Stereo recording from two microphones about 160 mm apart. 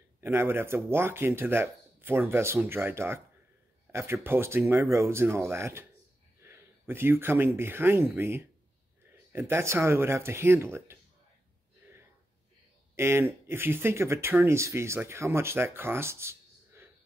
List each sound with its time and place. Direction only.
0.2 s speech: 15° right (ahead or behind)
12.9 s speech: 15° right (ahead or behind)